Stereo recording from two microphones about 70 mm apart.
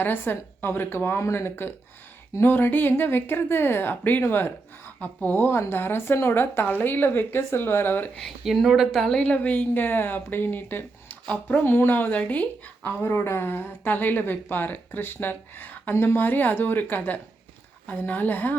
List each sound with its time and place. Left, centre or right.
0.0 s a woman's voice: left
8.4 s speech: centre
9.1 s speech: centre